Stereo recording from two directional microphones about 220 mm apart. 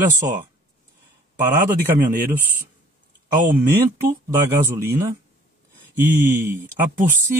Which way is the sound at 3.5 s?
10° right (ahead or behind).